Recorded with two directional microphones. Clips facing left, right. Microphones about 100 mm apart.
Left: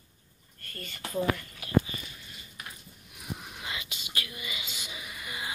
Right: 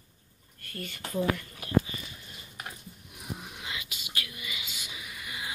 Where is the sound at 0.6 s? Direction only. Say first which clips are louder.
Right 2 dB; 5° right (ahead or behind).